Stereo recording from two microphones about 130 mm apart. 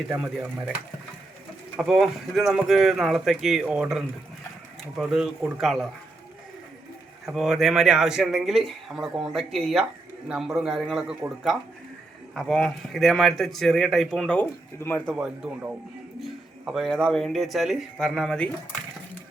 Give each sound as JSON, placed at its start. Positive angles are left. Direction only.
{"t": 0.0, "sound": "speech", "side_deg": -5}
{"t": 1.8, "sound": "speech", "side_deg": 0}
{"t": 7.3, "sound": "speech", "side_deg": -5}
{"t": 14.8, "sound": "speech", "side_deg": 15}
{"t": 15.1, "sound": "speech", "side_deg": -5}